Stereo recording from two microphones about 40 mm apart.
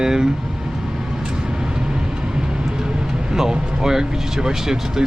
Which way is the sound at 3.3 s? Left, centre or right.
Centre.